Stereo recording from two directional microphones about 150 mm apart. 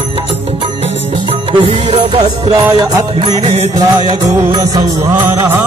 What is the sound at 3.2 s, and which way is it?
Music, 45° right (ahead or behind).